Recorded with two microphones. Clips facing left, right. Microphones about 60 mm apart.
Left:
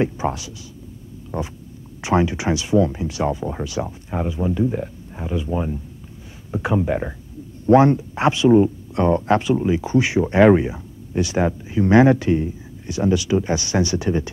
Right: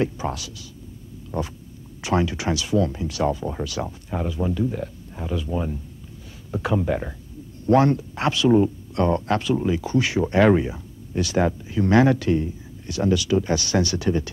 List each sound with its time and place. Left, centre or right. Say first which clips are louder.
0.0 s speech: left 3 dB; left